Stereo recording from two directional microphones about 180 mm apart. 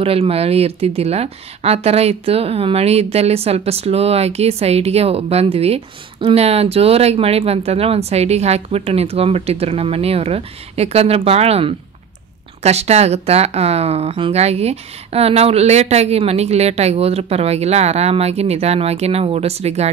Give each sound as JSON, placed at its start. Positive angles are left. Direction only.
{"t": 0.0, "sound": "speech", "side_deg": -30}